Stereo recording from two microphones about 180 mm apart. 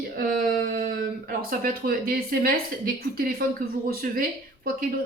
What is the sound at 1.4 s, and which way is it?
Speech, 55° right (ahead or behind).